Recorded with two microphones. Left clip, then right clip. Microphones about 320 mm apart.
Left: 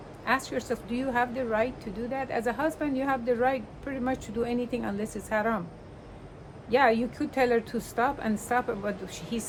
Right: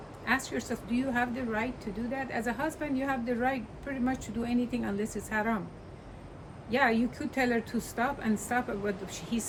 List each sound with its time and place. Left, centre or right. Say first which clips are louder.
0.3 s a woman's voice: left 3 dB; centre
6.7 s a woman's voice: left 4 dB; centre